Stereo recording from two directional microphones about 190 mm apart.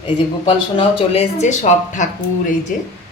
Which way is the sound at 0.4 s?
30° left (ahead or behind).